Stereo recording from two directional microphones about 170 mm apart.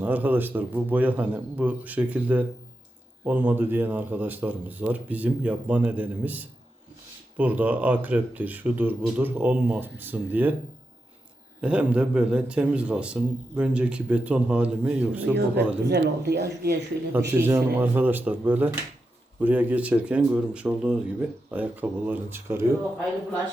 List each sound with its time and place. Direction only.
0.0 s a man's voice: 10° right (ahead or behind)
11.6 s a man's voice: 5° right (ahead or behind)
15.9 s speech: 75° right (ahead or behind)
17.1 s a man's voice: 15° right (ahead or behind)